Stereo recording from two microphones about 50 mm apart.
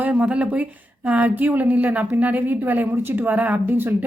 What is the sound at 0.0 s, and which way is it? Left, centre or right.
A woman's voice, right.